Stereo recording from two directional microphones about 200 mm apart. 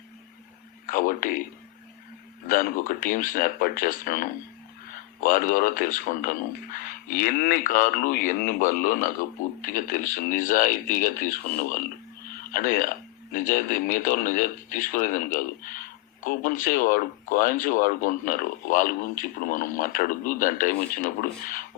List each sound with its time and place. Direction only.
0.9 s speech: 45° left (ahead or behind)
2.5 s speech: 45° left (ahead or behind)